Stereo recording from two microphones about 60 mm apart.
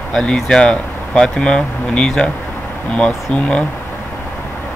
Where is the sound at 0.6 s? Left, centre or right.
Centre.